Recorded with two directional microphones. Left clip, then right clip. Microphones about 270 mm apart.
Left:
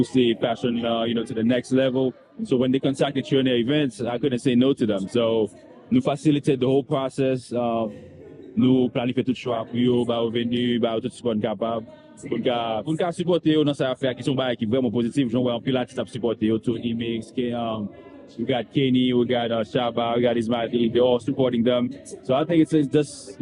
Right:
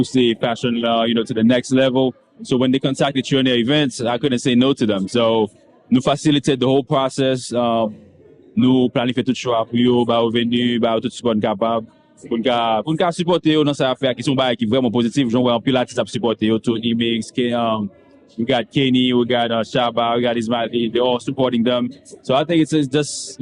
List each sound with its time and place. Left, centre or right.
0.0 s a man's voice: right